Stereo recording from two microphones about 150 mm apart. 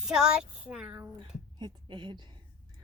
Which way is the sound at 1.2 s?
30° right (ahead or behind).